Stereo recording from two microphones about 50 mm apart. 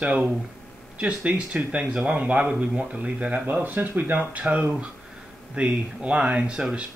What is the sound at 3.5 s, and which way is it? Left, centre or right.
Speech, right.